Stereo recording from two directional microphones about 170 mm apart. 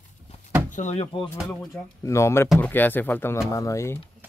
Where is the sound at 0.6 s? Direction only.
45° left (ahead or behind).